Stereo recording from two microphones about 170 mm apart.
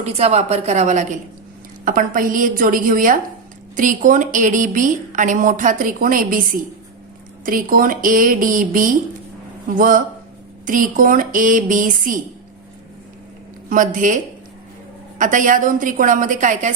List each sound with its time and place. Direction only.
0.0 s a woman's voice: 40° right (ahead or behind)
1.8 s a woman's voice: 55° right (ahead or behind)
13.7 s a woman's voice: 50° right (ahead or behind)
15.2 s a woman's voice: 50° right (ahead or behind)